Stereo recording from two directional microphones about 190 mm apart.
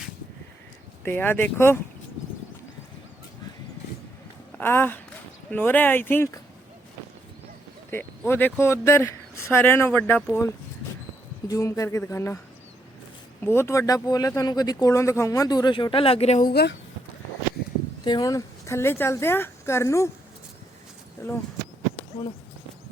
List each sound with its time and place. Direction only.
1.0 s speech: 10° left (ahead or behind)
4.5 s speech: 10° left (ahead or behind)
7.9 s speech: 10° left (ahead or behind)
13.4 s speech: 10° left (ahead or behind); by 16.5 s 35° left (ahead or behind)
16.5 s speech: 60° left (ahead or behind)
18.0 s speech: 20° left (ahead or behind)
21.2 s speech: 15° left (ahead or behind)